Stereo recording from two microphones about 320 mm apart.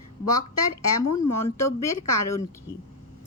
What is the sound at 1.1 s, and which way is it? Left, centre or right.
A woman's voice, centre.